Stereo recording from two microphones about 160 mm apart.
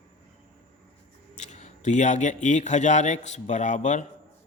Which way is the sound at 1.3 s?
45° left (ahead or behind).